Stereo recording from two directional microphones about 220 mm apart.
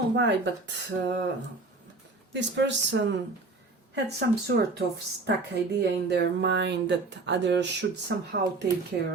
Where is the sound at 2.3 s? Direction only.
55° right (ahead or behind).